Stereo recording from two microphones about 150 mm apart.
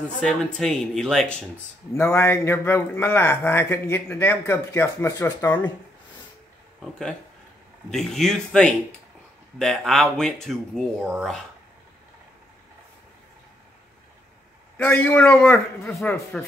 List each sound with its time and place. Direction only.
0.2 s speech: 5° left (ahead or behind)
2.0 s speech: 15° left (ahead or behind)
6.8 s speech: 5° left (ahead or behind)
14.9 s speech: 10° left (ahead or behind)